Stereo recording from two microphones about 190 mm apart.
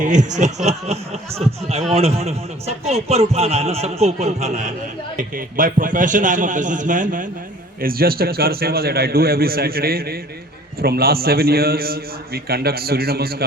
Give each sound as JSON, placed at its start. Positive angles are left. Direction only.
{"t": 0.0, "sound": "a man's voice", "side_deg": -40}